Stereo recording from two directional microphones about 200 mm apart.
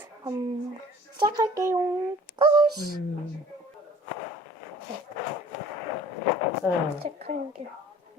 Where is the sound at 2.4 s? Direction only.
20° right (ahead or behind).